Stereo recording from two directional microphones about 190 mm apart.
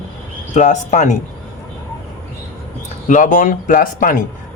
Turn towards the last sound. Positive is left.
turn(degrees=45)  # may be behind; listen again after turning